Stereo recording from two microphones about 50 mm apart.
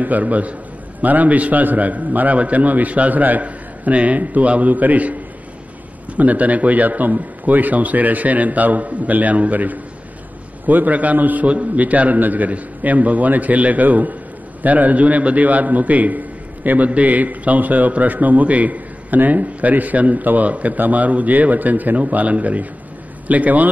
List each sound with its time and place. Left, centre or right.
0.0 s a man's voice: right
6.1 s a man's voice: right